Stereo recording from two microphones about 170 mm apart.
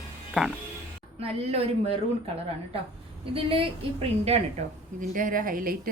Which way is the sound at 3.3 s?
35° right (ahead or behind).